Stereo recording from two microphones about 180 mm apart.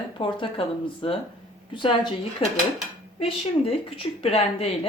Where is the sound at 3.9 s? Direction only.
30° left (ahead or behind).